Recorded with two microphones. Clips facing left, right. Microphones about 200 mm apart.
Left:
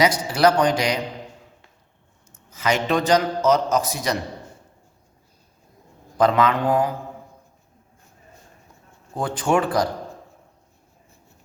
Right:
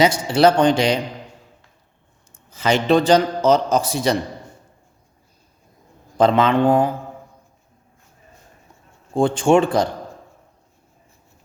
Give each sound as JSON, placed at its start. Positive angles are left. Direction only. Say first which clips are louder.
{"t": 0.0, "sound": "speech", "louder": "right 3 dB", "side_deg": -25}
{"t": 2.3, "sound": "a man's voice", "louder": "right 3 dB", "side_deg": -30}
{"t": 6.1, "sound": "speech", "louder": "right 3 dB", "side_deg": -30}
{"t": 9.1, "sound": "speech", "louder": "right 6 dB", "side_deg": -25}